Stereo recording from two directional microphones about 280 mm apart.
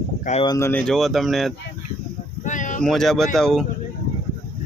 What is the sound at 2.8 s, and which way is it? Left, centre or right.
Speech, centre.